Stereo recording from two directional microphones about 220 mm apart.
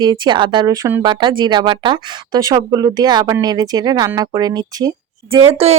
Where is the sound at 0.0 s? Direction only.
20° right (ahead or behind).